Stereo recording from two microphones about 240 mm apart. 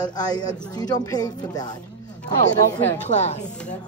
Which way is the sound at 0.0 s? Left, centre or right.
Centre.